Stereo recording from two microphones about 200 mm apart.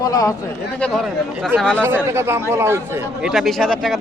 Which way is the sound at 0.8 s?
Centre (ahead or behind).